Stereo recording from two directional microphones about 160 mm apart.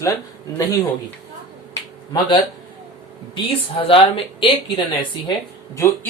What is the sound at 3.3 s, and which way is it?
Speech, 35° left (ahead or behind).